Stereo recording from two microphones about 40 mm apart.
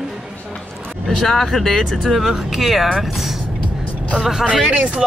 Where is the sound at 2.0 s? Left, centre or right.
Centre.